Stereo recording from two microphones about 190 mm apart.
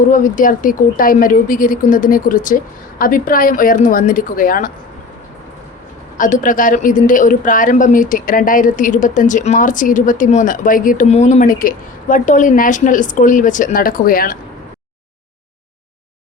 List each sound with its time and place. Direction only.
0.1 s a woman's voice: 45° left (ahead or behind)
6.1 s a woman's voice: 45° left (ahead or behind)